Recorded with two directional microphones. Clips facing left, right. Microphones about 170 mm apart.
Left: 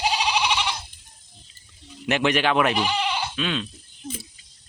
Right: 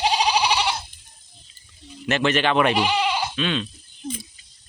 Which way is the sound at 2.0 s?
15° left (ahead or behind).